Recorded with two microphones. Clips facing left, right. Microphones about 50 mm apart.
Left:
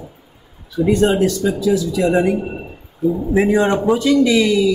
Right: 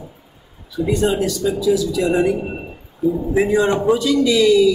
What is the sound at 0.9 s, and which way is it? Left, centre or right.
Speech, left.